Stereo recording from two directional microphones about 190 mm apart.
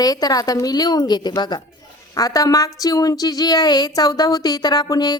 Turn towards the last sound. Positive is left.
turn(degrees=20)  # may be behind; listen again after turning